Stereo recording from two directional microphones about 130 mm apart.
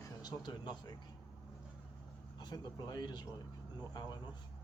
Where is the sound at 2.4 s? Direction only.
30° left (ahead or behind).